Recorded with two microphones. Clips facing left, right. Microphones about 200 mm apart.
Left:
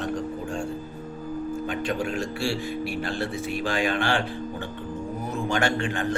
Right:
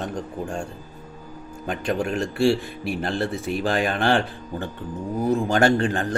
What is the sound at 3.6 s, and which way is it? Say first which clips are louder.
Speech: right 2 dB; 35° right (ahead or behind).